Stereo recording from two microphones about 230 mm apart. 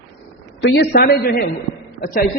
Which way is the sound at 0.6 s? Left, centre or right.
Left.